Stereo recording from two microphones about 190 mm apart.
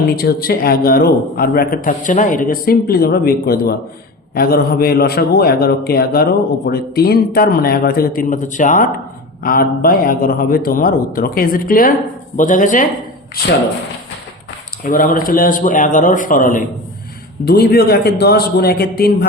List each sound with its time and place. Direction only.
0.2 s a man's voice: 55° left (ahead or behind)
13.4 s a man's voice: 55° left (ahead or behind)
14.8 s a man's voice: 45° left (ahead or behind)
17.4 s a man's voice: 55° left (ahead or behind)